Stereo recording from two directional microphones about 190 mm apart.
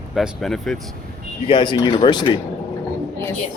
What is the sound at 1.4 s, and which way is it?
Speech, 25° left (ahead or behind).